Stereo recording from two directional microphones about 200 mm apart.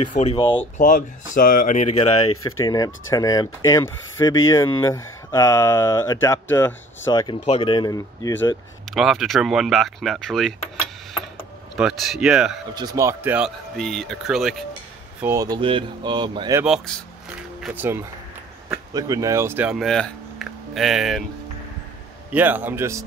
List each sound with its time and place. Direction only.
0.1 s speech: 30° left (ahead or behind)
0.7 s speech: 45° left (ahead or behind)
2.2 s speech: 90° left
2.6 s speech: 20° left (ahead or behind)
8.8 s speech: centre (ahead or behind)
11.7 s speech: centre (ahead or behind)
12.7 s speech: 20° right (ahead or behind)
13.7 s speech: centre (ahead or behind)
15.1 s speech: 15° right (ahead or behind)
16.6 s speech: centre (ahead or behind)
22.3 s speech: 10° right (ahead or behind)